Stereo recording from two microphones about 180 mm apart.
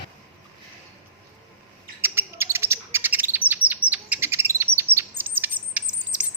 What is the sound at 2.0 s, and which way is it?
Bird, 15° right (ahead or behind).